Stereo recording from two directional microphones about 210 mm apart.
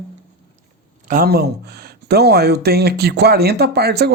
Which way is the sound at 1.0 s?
45° right (ahead or behind).